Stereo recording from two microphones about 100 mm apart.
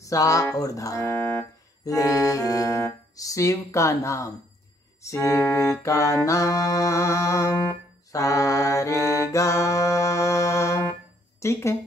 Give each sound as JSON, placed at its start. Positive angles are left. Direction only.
{"t": 0.0, "sound": "music", "side_deg": 35}
{"t": 8.1, "sound": "mantra", "side_deg": 35}
{"t": 11.3, "sound": "speech", "side_deg": 30}